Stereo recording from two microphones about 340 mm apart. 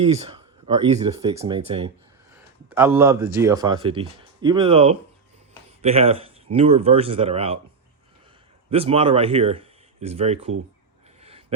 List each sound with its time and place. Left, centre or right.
0.0 s speech: centre
8.7 s speech: centre
11.2 s a sound: centre